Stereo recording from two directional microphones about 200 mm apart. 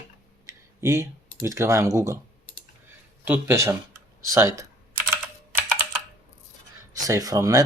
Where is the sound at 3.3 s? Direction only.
15° right (ahead or behind).